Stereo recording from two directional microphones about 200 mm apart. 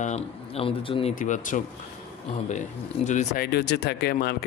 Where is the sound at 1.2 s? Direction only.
40° left (ahead or behind).